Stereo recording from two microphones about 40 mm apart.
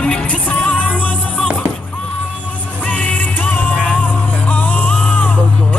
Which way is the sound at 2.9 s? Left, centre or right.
Left.